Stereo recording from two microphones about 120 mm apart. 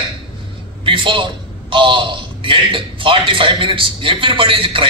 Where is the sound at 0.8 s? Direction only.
45° right (ahead or behind).